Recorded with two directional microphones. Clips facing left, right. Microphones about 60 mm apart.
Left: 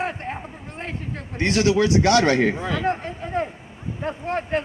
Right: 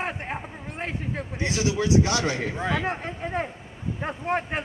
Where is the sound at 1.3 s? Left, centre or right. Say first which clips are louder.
Left 8 dB; left.